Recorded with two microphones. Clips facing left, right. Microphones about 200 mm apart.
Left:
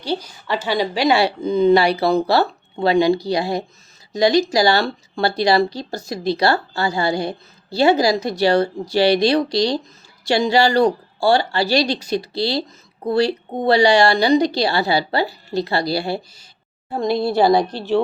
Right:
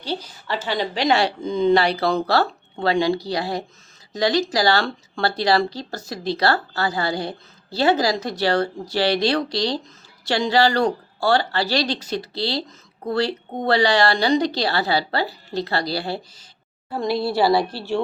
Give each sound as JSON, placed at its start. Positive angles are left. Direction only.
{"t": 0.0, "sound": "speech", "side_deg": 15}
{"t": 16.9, "sound": "a woman's voice", "side_deg": 20}